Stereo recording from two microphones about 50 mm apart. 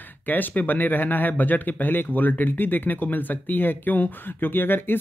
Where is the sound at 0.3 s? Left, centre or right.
Left.